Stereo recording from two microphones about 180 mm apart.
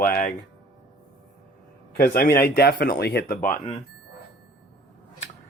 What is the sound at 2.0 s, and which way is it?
Speech, 55° left (ahead or behind).